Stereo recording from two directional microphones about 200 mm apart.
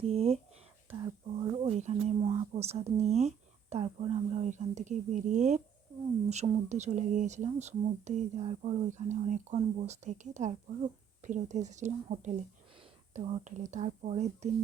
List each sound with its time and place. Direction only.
0.0 s speech: 30° right (ahead or behind)
1.6 s speech: 35° right (ahead or behind)